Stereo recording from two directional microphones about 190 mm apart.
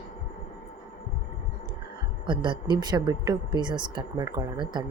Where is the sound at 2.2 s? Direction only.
25° right (ahead or behind).